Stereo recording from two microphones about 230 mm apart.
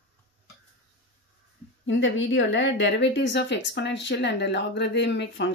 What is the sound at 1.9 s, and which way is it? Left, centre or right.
A woman's voice, left.